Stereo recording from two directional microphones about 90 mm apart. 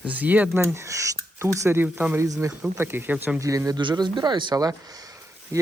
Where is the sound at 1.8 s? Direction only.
20° right (ahead or behind).